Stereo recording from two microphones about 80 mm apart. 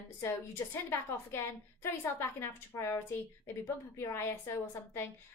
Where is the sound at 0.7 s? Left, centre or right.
Left.